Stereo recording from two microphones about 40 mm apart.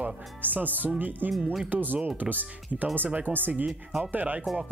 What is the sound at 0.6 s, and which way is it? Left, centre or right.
Speech, right.